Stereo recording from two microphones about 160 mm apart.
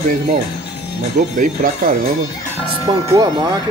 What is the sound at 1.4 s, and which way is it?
Speech, 55° right (ahead or behind).